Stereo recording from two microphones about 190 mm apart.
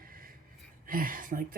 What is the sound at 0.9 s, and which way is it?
Speech, 45° right (ahead or behind).